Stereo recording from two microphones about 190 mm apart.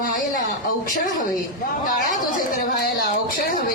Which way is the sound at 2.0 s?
45° left (ahead or behind).